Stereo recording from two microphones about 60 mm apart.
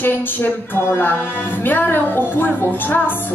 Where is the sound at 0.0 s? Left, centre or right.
Left.